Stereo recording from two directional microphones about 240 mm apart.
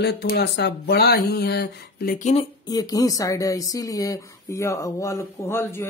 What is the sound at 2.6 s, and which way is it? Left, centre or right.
Speech, centre.